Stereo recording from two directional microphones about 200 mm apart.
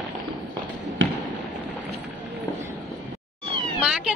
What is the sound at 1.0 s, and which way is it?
Basketball bounce, 70° right (ahead or behind).